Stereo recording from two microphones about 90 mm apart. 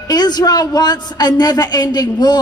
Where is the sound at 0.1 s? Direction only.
50° left (ahead or behind).